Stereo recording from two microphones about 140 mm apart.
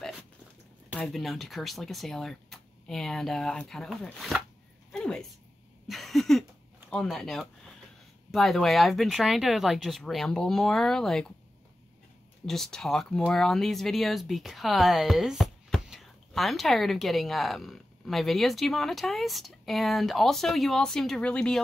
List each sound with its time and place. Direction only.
0.9 s speech: centre (ahead or behind)
4.9 s a sound: 5° left (ahead or behind)
6.9 s speech: centre (ahead or behind)
12.4 s speech: 5° left (ahead or behind)